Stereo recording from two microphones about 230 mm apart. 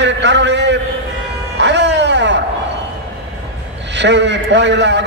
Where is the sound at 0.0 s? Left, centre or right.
Right.